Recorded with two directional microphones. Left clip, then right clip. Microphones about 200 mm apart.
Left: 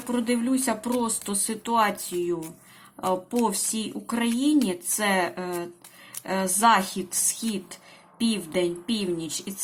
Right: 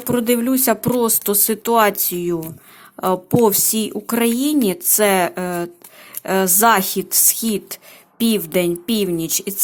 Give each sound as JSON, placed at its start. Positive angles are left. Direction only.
{"t": 0.1, "sound": "speech", "side_deg": -50}